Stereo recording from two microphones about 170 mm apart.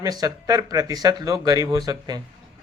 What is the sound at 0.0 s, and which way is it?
A man's voice, 20° right (ahead or behind).